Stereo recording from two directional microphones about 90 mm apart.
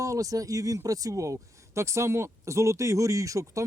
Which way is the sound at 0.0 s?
40° right (ahead or behind).